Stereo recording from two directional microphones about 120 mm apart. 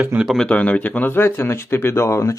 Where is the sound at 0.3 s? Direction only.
5° left (ahead or behind).